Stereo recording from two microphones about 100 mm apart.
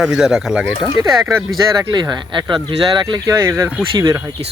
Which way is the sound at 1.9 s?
45° right (ahead or behind).